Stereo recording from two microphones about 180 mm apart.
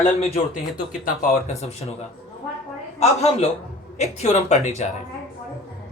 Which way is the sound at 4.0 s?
40° left (ahead or behind).